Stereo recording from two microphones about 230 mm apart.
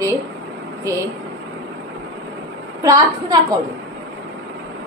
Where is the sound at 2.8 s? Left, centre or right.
Centre.